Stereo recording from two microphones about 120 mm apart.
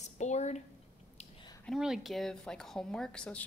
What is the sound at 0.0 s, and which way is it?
Speech, 70° left (ahead or behind).